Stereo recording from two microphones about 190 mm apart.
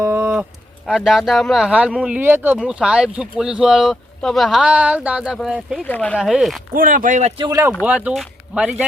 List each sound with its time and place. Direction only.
0.0 s livestock: 15° right (ahead or behind)
0.9 s speech: centre (ahead or behind)
6.7 s speech: 45° right (ahead or behind)
7.7 s speech: 5° right (ahead or behind)